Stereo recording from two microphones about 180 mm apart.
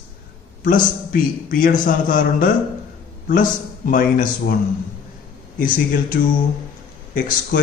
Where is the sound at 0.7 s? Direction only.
50° left (ahead or behind).